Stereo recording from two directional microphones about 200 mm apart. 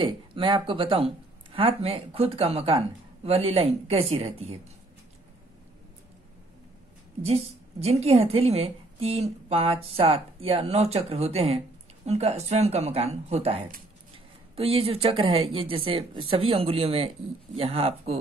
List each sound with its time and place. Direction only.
0.0 s speech: 25° right (ahead or behind)
7.2 s a woman's voice: 30° right (ahead or behind)